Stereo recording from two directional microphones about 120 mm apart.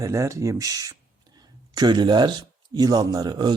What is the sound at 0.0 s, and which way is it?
Speech, 25° right (ahead or behind).